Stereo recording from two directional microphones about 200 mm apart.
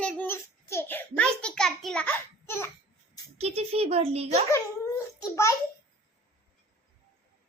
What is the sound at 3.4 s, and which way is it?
A child's voice, 30° right (ahead or behind).